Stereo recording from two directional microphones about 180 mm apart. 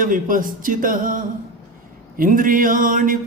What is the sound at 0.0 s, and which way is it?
Mantra, 50° right (ahead or behind).